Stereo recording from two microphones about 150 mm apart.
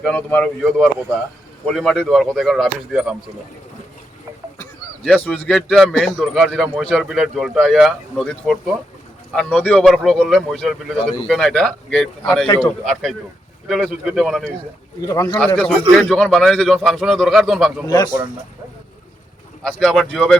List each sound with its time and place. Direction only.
0.0 s a man's voice: 10° left (ahead or behind); by 3.2 s 5° right (ahead or behind)
5.0 s a man's voice: 5° left (ahead or behind)
15.0 s speech: 20° left (ahead or behind)
15.4 s a man's voice: 5° left (ahead or behind)
17.8 s speech: 25° left (ahead or behind)
19.6 s a man's voice: 5° left (ahead or behind)